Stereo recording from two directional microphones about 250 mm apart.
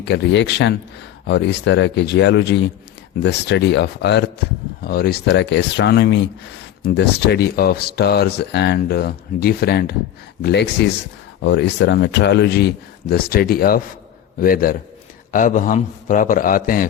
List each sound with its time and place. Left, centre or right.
0.0 s speech: left